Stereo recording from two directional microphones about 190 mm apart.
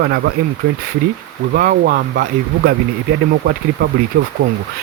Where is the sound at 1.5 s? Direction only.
50° right (ahead or behind).